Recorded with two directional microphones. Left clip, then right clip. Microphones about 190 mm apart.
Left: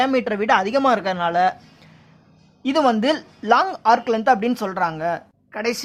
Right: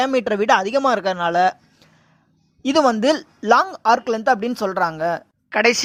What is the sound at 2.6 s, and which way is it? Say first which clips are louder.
A woman's voice: right 2 dB; 25° right (ahead or behind).